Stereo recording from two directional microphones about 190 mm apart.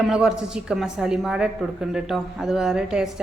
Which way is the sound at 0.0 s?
5° right (ahead or behind).